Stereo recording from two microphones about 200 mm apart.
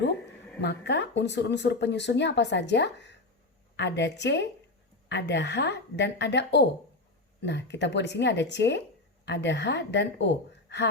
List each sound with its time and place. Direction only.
0.6 s speech: 60° left (ahead or behind)